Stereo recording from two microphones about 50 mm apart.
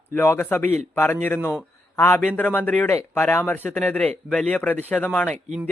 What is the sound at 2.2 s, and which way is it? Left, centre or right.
Speech, left.